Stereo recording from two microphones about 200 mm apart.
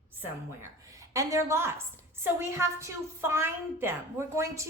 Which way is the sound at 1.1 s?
15° right (ahead or behind).